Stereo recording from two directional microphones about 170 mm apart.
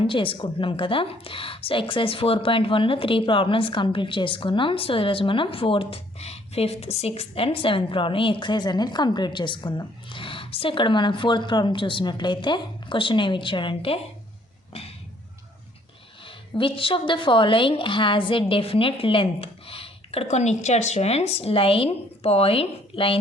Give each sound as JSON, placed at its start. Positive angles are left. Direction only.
{"t": 0.0, "sound": "a woman's voice", "side_deg": 30}
{"t": 16.6, "sound": "a woman's voice", "side_deg": 30}